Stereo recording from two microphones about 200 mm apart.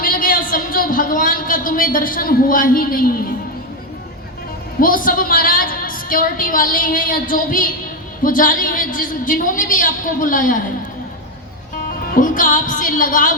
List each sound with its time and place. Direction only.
0.0 s a sound: 45° left (ahead or behind)
4.8 s a woman's voice: 45° left (ahead or behind)
12.1 s music: 40° left (ahead or behind)